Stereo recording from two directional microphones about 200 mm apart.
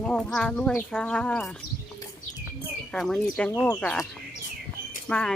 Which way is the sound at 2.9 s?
Centre (ahead or behind).